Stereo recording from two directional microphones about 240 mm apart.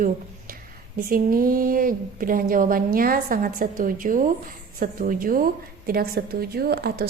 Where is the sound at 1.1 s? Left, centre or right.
Right.